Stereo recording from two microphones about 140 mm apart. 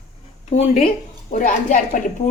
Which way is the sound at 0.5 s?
55° left (ahead or behind).